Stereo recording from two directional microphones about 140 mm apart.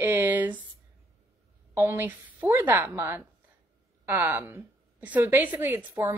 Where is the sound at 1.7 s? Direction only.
15° right (ahead or behind).